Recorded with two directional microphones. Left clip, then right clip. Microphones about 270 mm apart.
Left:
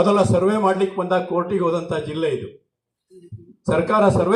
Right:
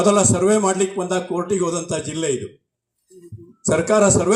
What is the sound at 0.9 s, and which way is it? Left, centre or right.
Speech, right.